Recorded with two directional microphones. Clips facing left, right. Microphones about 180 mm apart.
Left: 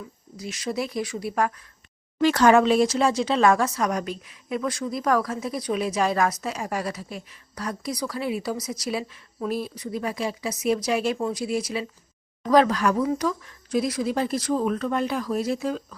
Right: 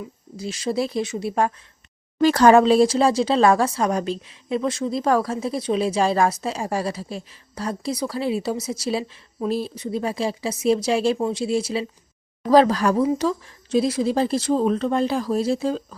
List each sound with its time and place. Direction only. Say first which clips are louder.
0.0 s speech: right 5 dB; 30° right (ahead or behind)